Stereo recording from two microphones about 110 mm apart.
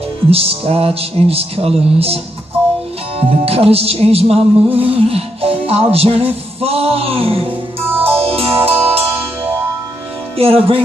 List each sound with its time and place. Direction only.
0.3 s music: 60° right (ahead or behind)
3.2 s music: 65° right (ahead or behind)
7.8 s music: 20° right (ahead or behind)
8.2 s music: 65° right (ahead or behind)
10.3 s music: 60° right (ahead or behind)